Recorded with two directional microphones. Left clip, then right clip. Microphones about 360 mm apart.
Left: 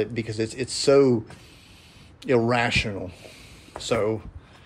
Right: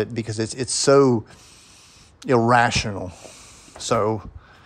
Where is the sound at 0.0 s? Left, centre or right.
Centre.